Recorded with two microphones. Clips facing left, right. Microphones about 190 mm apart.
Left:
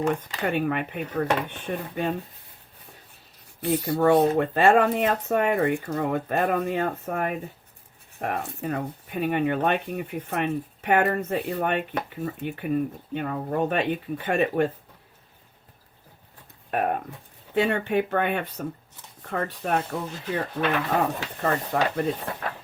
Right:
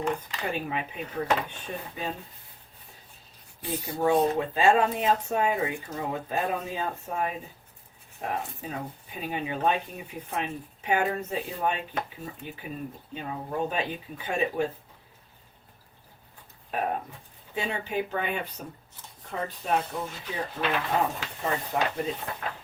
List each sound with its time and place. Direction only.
0.4 s speech: 65° left (ahead or behind)
3.6 s speech: 70° left (ahead or behind)
17.5 s speech: 65° left (ahead or behind)
22.4 s a sound: 50° left (ahead or behind)